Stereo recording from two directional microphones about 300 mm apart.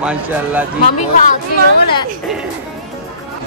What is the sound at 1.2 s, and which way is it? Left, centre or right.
Speech, left.